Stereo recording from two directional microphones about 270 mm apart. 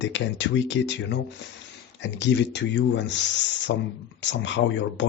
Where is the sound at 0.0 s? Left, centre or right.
Left.